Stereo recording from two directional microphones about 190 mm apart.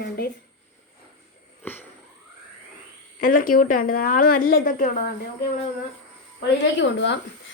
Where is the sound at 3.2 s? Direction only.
45° left (ahead or behind).